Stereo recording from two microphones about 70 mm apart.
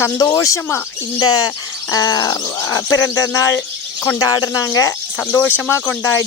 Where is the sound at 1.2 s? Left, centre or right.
Left.